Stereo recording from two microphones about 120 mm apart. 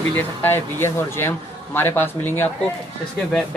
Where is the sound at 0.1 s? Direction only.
15° left (ahead or behind).